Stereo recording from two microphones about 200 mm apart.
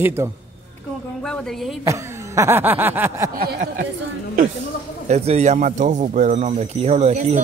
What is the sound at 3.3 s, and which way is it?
Speech, 50° right (ahead or behind).